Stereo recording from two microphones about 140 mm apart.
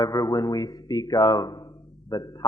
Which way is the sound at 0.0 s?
25° left (ahead or behind).